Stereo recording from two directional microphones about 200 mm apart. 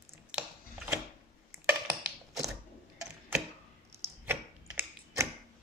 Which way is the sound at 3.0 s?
10° right (ahead or behind).